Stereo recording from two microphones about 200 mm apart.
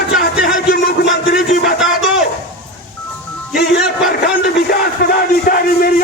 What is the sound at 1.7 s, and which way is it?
Speech, centre (ahead or behind).